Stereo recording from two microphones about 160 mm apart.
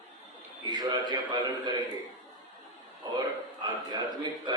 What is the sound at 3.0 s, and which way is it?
Speech, 25° right (ahead or behind).